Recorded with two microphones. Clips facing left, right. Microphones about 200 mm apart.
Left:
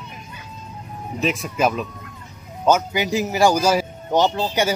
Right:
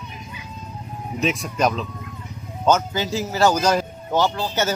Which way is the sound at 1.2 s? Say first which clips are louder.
Left 1 dB; centre (ahead or behind).